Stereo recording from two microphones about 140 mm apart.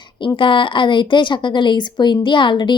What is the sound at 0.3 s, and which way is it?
Speech, 35° left (ahead or behind).